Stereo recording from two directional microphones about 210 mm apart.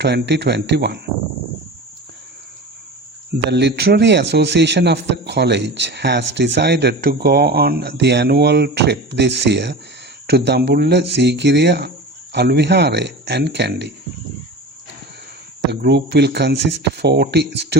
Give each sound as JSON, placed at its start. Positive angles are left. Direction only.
{"t": 0.0, "sound": "speech", "side_deg": -55}
{"t": 3.5, "sound": "a man's voice", "side_deg": -55}
{"t": 15.7, "sound": "speech", "side_deg": -55}